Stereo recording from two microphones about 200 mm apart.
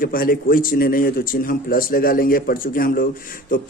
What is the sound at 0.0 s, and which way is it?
Speech, 45° left (ahead or behind).